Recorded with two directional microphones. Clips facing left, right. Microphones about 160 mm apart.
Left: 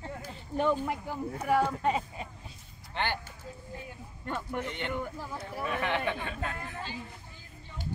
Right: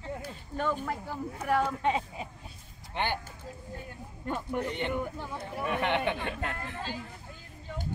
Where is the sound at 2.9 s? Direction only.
15° right (ahead or behind).